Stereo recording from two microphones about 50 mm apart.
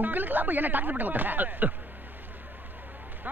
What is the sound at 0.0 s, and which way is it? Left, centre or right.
A man's voice, right.